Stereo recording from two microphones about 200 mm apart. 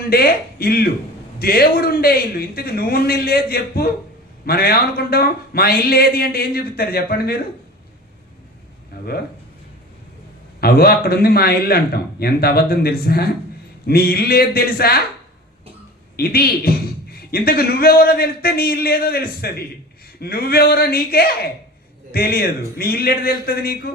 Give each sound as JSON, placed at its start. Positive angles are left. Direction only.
{"t": 0.1, "sound": "speech", "side_deg": 50}
{"t": 8.9, "sound": "a sound", "side_deg": 50}
{"t": 10.6, "sound": "speech", "side_deg": 50}
{"t": 16.1, "sound": "speech", "side_deg": 50}